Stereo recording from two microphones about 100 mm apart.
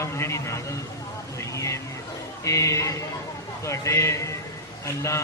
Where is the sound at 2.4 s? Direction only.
30° left (ahead or behind).